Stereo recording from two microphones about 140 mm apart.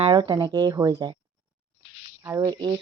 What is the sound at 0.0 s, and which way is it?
Speech, 30° right (ahead or behind).